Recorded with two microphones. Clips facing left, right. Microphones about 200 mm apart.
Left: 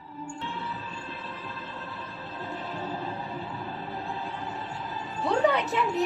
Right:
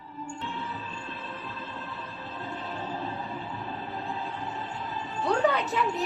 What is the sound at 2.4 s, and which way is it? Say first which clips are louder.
Music: left 1 dB; centre (ahead or behind).